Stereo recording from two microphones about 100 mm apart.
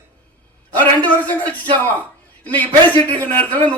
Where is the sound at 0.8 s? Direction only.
15° left (ahead or behind).